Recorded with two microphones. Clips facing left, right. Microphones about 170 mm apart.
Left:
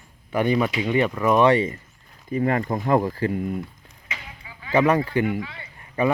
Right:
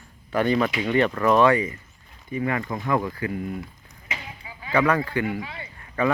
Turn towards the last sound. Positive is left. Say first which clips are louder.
# left 1 dB
turn(degrees=15)  # may be behind; listen again after turning